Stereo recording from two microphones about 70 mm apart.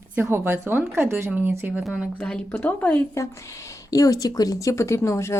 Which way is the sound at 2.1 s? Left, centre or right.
Centre.